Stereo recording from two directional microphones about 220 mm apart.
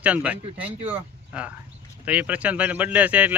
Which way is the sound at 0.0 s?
5° right (ahead or behind).